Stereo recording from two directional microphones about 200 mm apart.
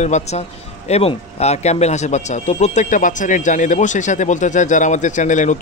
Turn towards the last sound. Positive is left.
turn(degrees=40)  # may be behind; listen again after turning